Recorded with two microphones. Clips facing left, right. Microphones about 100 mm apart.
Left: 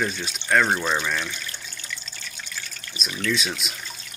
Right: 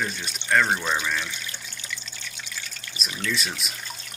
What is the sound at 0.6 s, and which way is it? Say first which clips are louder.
Speech: left 2 dB; 15° left (ahead or behind).